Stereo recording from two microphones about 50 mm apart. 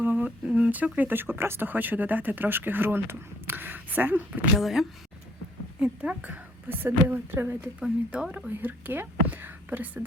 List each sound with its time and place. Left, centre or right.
0.0 s humming: right
0.4 s speech: right
0.9 s speech: right
4.5 s speech: centre
5.8 s speech: right
6.7 s a woman's voice: right
7.8 s speech: right
8.4 s speech: right